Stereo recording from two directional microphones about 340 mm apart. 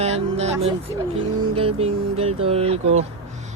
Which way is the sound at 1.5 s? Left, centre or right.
Centre.